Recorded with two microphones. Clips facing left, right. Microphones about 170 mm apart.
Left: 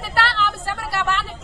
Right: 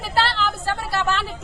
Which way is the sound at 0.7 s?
25° right (ahead or behind).